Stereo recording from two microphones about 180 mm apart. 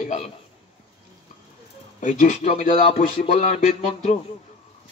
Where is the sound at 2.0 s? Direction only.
45° left (ahead or behind).